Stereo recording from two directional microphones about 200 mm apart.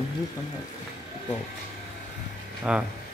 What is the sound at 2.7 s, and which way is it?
Speech, 5° right (ahead or behind).